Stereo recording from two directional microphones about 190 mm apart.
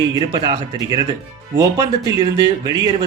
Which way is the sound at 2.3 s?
20° right (ahead or behind).